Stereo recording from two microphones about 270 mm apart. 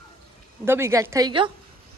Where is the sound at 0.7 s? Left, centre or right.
Centre.